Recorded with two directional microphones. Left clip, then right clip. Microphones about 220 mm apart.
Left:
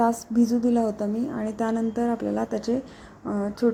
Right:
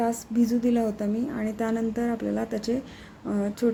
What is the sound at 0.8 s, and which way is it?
Speech, 15° right (ahead or behind).